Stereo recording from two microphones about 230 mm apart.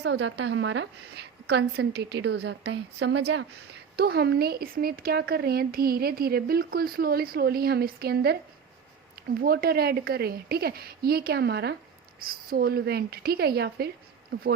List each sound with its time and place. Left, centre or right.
0.0 s a woman's voice: right